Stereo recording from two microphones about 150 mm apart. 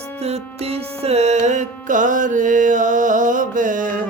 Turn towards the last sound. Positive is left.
turn(degrees=-60)  # may be behind; listen again after turning